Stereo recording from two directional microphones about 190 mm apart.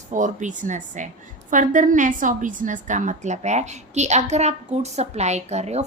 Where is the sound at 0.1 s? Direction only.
40° right (ahead or behind).